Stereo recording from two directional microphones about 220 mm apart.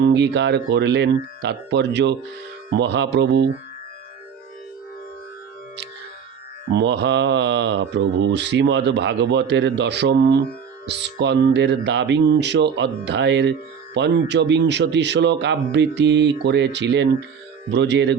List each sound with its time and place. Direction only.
0.0 s speech: 50° right (ahead or behind)
6.7 s speech: 50° right (ahead or behind)